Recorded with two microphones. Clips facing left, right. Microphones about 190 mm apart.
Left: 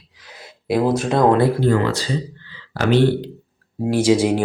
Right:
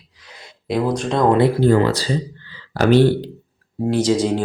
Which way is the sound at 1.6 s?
35° right (ahead or behind).